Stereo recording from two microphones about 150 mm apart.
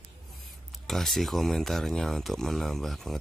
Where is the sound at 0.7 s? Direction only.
Centre (ahead or behind).